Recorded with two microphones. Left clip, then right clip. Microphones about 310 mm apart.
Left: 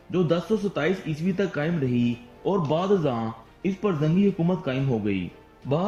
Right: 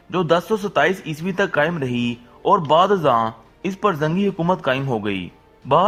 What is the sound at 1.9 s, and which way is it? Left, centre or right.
Speech, centre.